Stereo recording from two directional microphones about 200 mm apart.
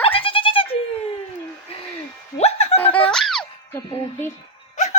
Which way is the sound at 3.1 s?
5° left (ahead or behind).